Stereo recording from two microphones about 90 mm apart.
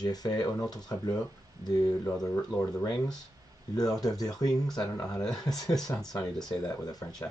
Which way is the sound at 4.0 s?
45° left (ahead or behind).